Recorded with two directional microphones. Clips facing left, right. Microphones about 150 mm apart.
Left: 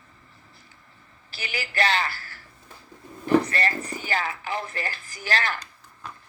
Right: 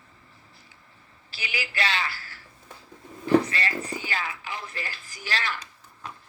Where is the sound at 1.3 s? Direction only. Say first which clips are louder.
Left 1 dB; 45° left (ahead or behind).